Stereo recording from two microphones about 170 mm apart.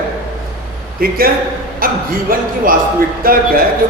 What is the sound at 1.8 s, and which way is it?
A man's voice, 55° right (ahead or behind).